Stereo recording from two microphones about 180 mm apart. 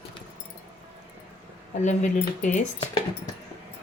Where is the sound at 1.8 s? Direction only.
40° left (ahead or behind).